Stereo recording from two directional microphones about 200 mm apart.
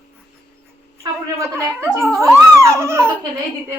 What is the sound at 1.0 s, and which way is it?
Speech, 15° right (ahead or behind).